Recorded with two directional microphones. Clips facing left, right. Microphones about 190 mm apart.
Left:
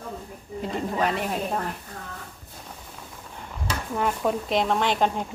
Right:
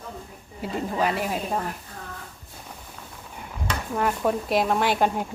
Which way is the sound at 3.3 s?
10° right (ahead or behind).